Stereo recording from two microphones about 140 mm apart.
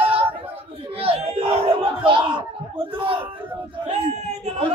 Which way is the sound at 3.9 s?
55° right (ahead or behind).